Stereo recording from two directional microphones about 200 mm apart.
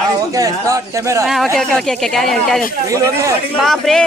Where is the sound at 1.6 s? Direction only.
5° left (ahead or behind).